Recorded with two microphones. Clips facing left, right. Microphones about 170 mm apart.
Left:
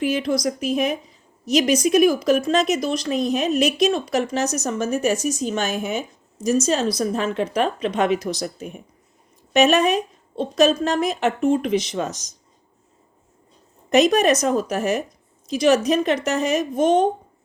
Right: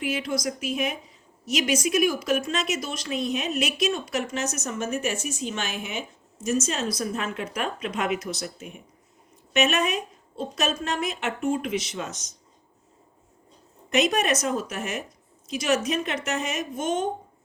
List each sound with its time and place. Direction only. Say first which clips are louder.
0.0 s speech: left 6 dB; 35° left (ahead or behind)
13.9 s speech: left 7 dB; 35° left (ahead or behind)